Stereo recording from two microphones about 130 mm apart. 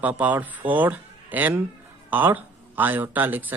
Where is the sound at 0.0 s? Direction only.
10° right (ahead or behind).